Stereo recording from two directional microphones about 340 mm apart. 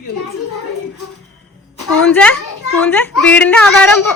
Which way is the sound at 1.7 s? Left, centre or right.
Left.